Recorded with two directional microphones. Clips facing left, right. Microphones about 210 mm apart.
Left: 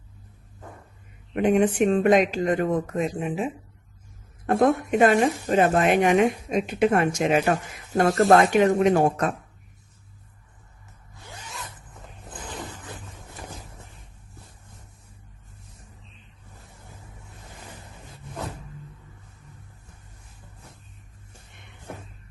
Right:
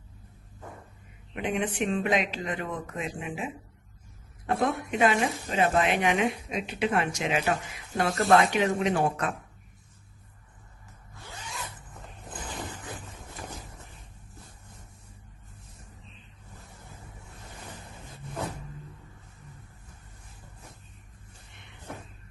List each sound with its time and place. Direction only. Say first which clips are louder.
1.4 s speech: left 9 dB; 45° left (ahead or behind)
11.1 s zipper: left 1 dB; 15° left (ahead or behind)